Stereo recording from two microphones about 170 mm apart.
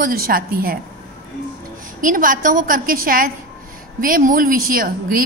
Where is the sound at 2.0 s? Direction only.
55° right (ahead or behind).